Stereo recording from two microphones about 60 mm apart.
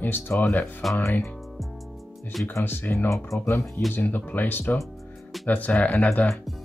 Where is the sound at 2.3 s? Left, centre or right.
Centre.